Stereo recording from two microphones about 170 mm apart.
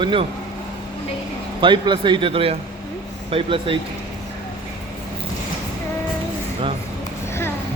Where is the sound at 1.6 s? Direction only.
30° right (ahead or behind).